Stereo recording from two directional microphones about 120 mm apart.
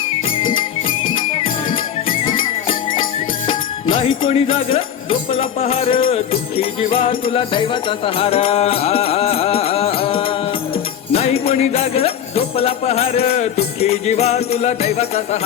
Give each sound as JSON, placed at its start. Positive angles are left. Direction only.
{"t": 3.9, "sound": "music", "side_deg": 50}
{"t": 11.1, "sound": "jingle bell", "side_deg": 55}